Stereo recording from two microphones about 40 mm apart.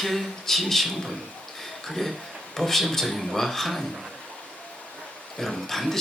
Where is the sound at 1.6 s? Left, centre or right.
Centre.